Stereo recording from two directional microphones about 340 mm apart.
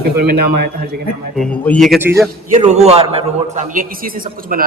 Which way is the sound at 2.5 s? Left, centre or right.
Centre.